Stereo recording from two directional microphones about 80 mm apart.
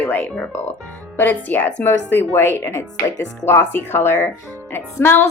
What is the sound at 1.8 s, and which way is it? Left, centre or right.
Speech, left.